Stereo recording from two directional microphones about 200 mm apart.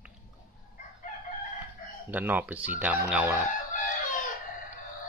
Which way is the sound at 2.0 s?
10° right (ahead or behind).